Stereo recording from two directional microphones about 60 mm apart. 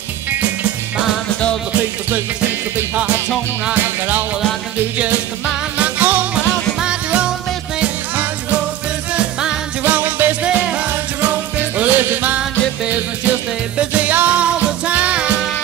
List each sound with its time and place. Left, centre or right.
5.8 s music: right
6.3 s music: centre
9.1 s music: centre
9.8 s music: right
10.4 s music: centre
13.7 s music: right